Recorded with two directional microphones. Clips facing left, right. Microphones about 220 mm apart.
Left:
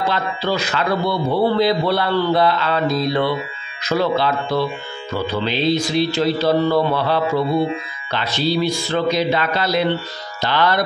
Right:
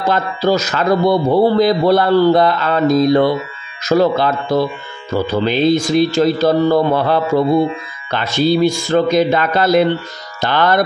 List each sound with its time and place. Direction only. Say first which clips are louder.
0.0 s a man's voice: right 5 dB; 40° right (ahead or behind)